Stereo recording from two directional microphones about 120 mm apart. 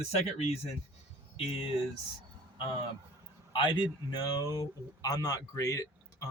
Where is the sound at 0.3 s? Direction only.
60° left (ahead or behind).